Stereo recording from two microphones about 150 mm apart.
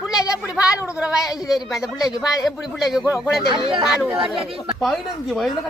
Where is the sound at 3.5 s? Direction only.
35° right (ahead or behind).